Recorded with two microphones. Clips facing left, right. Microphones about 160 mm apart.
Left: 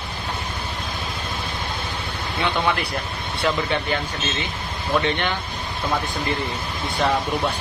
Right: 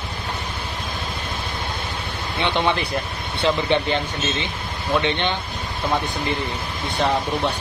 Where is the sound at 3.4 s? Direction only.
25° right (ahead or behind).